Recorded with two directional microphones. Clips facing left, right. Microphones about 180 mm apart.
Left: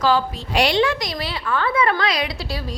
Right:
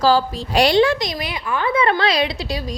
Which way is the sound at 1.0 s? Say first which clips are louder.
Right 1 dB; 15° right (ahead or behind).